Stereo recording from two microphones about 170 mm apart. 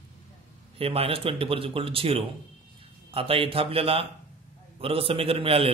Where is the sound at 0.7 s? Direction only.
35° right (ahead or behind).